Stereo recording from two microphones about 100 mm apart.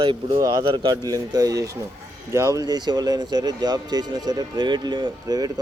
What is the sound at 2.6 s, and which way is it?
Speech, 45° right (ahead or behind).